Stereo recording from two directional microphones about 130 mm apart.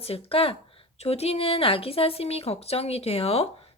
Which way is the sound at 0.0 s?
50° left (ahead or behind).